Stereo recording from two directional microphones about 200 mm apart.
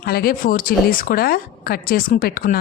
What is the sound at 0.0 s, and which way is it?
A woman's voice, 50° left (ahead or behind).